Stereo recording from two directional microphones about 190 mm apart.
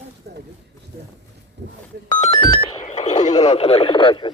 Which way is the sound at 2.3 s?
25° left (ahead or behind).